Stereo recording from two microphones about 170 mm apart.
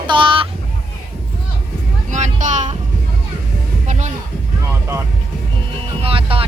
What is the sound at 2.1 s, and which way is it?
Vehicle, 45° right (ahead or behind).